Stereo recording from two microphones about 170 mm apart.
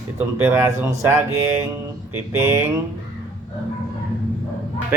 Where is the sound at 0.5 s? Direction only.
15° right (ahead or behind).